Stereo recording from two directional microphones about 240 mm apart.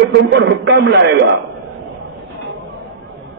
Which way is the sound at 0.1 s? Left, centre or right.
Right.